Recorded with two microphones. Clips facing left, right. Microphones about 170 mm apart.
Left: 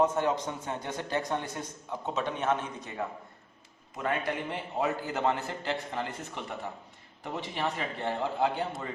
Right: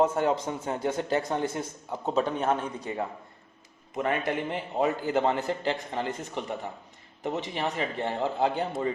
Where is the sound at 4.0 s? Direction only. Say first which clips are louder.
Right 4 dB; 20° right (ahead or behind).